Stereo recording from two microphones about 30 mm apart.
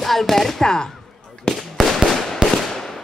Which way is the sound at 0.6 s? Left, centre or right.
Left.